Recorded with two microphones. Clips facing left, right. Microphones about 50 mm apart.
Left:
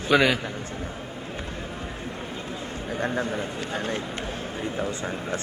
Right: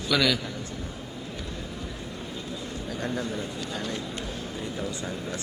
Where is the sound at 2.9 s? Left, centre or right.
Left.